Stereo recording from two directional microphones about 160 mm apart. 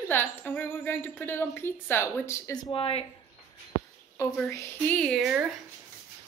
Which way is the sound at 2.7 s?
35° left (ahead or behind).